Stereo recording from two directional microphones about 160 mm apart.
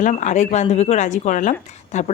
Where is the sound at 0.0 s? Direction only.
50° left (ahead or behind).